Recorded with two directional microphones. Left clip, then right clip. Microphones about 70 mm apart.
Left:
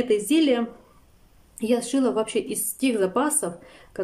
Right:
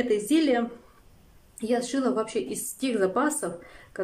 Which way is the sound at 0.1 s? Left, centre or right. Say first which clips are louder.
Left 3 dB; left.